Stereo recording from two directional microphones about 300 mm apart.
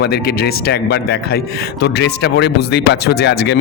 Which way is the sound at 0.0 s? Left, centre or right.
Left.